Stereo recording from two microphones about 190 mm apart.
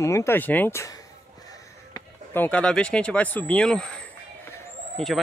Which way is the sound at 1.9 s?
10° left (ahead or behind).